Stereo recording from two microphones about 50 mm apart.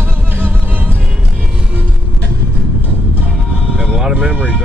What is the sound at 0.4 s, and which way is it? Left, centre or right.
Music, right.